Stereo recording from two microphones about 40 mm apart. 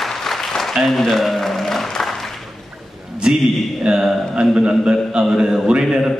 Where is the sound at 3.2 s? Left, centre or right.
Right.